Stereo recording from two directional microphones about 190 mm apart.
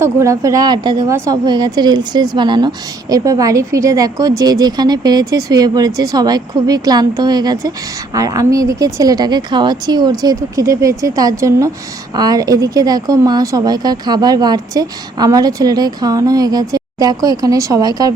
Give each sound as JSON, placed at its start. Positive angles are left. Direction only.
{"t": 0.0, "sound": "a woman's voice", "side_deg": -15}